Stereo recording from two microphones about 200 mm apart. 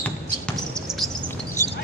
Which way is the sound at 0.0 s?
5° left (ahead or behind).